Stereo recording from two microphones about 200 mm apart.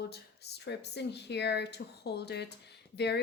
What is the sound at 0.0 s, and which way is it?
Speech, 55° left (ahead or behind).